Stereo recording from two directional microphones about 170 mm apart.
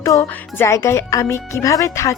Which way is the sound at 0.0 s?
15° left (ahead or behind).